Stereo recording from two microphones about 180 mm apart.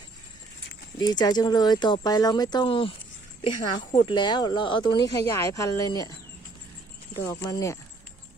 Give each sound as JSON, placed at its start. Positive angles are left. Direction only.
{"t": 0.9, "sound": "speech", "side_deg": 20}
{"t": 7.2, "sound": "speech", "side_deg": 20}